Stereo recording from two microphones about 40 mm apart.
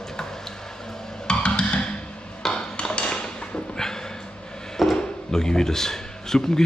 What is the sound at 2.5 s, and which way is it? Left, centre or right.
Dishes, left.